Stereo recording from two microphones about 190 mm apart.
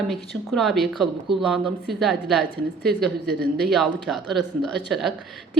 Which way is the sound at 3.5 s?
Centre (ahead or behind).